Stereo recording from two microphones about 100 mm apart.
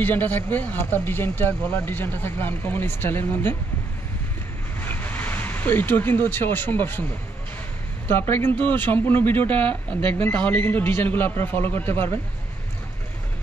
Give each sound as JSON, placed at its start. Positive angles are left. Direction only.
{"t": 0.0, "sound": "speech", "side_deg": 20}
{"t": 4.7, "sound": "speech", "side_deg": 20}
{"t": 8.1, "sound": "speech", "side_deg": 20}